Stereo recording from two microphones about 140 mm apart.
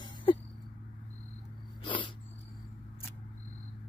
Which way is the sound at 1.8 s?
35° left (ahead or behind).